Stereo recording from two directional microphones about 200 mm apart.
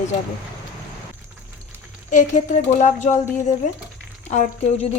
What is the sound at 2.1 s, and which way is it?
A woman's voice, 35° left (ahead or behind).